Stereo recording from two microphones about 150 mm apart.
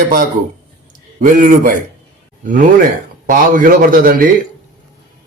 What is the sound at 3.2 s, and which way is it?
A man's voice, 65° right (ahead or behind).